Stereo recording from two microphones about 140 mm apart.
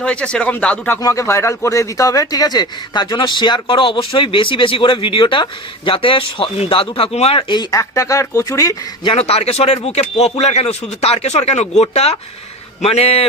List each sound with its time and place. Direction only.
0.0 s speech: 10° left (ahead or behind)
1.0 s speech: 20° left (ahead or behind)
9.0 s speech: 45° left (ahead or behind)